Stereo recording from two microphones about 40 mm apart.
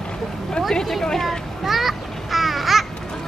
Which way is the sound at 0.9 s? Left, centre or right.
Centre.